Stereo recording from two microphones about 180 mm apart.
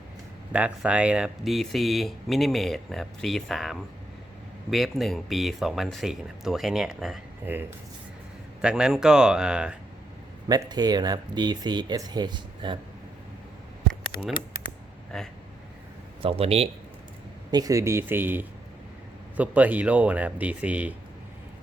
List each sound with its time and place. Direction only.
0.5 s speech: 5° right (ahead or behind)
8.6 s speech: 5° right (ahead or behind)
10.5 s speech: 20° right (ahead or behind)
15.1 s speech: 5° left (ahead or behind)
16.2 s a man's voice: 35° right (ahead or behind)
17.5 s speech: 20° right (ahead or behind)